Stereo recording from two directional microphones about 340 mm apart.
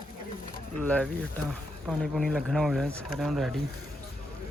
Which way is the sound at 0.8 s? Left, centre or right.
Centre.